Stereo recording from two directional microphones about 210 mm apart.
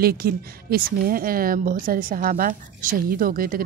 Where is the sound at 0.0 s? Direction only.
45° right (ahead or behind).